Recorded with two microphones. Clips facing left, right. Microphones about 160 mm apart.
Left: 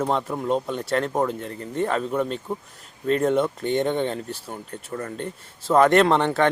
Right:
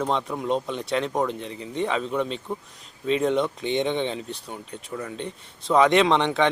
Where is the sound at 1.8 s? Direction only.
5° left (ahead or behind).